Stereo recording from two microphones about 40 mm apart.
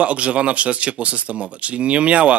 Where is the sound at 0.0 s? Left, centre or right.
Right.